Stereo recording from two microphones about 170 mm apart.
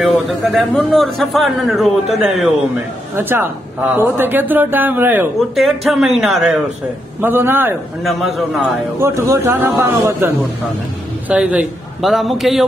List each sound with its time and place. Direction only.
0.0 s a man's voice: centre (ahead or behind)
3.2 s speech: 10° right (ahead or behind)
5.6 s a man's voice: centre (ahead or behind)
7.2 s speech: 10° right (ahead or behind)
8.0 s a man's voice: centre (ahead or behind)
9.0 s a man's voice: 15° right (ahead or behind); by 12.6 s centre (ahead or behind)